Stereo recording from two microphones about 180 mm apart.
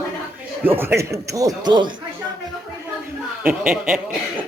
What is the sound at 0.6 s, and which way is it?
A man's voice, 10° right (ahead or behind).